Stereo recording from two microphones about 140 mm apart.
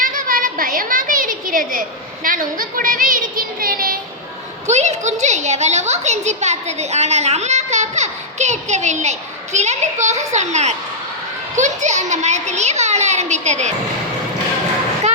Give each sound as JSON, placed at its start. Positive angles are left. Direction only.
{"t": 0.0, "sound": "a sound", "side_deg": -80}
{"t": 2.2, "sound": "speech", "side_deg": -75}
{"t": 4.6, "sound": "a woman's voice", "side_deg": -55}